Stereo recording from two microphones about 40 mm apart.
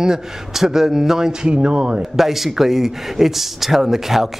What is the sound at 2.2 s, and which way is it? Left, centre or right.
A man's voice, centre.